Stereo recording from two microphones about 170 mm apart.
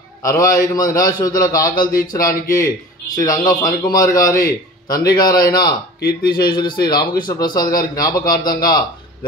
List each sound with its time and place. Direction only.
0.2 s a man's voice: 20° left (ahead or behind)
1.9 s speech: 55° left (ahead or behind)
2.2 s a man's voice: 15° left (ahead or behind)
5.9 s speech: 65° left (ahead or behind)
6.3 s a man's voice: 25° left (ahead or behind)